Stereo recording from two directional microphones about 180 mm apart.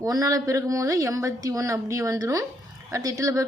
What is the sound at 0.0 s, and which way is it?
A woman's voice, 20° right (ahead or behind).